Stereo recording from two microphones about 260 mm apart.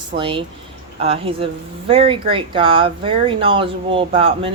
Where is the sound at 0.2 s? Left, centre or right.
Centre.